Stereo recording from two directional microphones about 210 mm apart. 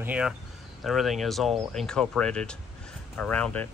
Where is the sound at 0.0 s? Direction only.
5° right (ahead or behind).